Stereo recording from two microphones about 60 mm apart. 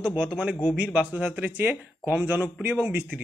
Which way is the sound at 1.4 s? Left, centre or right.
Right.